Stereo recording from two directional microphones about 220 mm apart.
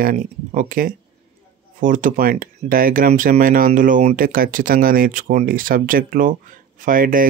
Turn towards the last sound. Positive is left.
turn(degrees=-40)  # may be behind; listen again after turning